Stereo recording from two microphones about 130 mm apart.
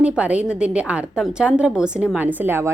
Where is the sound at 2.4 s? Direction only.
20° right (ahead or behind).